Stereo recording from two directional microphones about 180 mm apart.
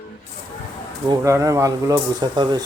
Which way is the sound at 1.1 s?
20° right (ahead or behind).